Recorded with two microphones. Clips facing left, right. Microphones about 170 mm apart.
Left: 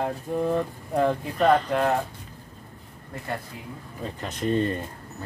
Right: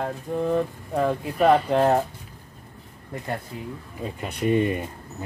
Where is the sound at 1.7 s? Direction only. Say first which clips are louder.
Right 4 dB; 30° right (ahead or behind).